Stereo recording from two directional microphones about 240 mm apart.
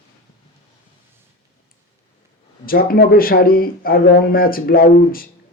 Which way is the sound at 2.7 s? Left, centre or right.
Left.